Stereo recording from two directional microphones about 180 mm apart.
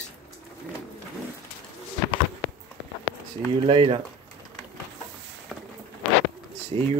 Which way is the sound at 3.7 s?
30° right (ahead or behind).